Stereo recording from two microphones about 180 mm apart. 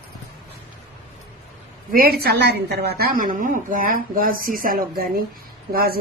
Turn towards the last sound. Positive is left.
turn(degrees=-55)  # may be behind; listen again after turning